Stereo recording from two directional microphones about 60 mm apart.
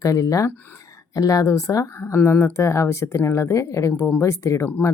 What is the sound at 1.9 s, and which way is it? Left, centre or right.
Speech, left.